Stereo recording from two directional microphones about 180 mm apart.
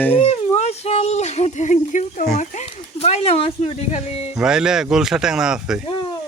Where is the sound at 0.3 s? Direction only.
35° left (ahead or behind).